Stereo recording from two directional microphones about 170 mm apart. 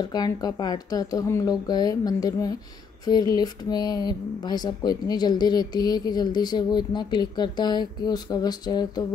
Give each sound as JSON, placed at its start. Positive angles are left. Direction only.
{"t": 0.1, "sound": "speech", "side_deg": 25}